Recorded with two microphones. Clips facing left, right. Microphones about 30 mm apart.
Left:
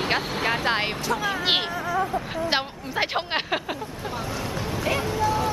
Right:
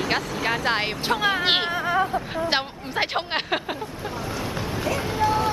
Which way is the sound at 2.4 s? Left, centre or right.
Centre.